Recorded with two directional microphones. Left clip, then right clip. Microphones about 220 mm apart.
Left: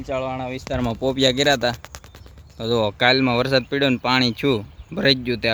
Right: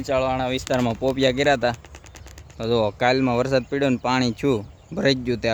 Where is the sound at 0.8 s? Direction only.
5° left (ahead or behind).